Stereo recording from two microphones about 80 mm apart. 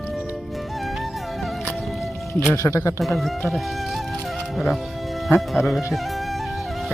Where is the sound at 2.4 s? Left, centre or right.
Left.